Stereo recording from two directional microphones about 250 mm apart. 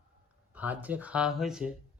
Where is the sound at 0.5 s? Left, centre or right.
Centre.